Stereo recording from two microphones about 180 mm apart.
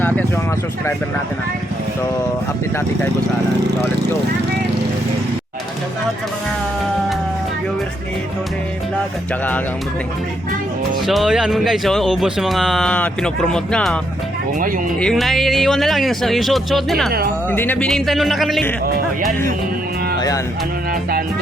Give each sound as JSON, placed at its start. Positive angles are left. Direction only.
{"t": 11.0, "sound": "speech", "side_deg": 0}
{"t": 20.1, "sound": "music", "side_deg": 20}